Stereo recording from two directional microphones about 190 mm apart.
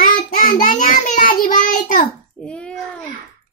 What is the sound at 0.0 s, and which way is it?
Child singing, 45° left (ahead or behind).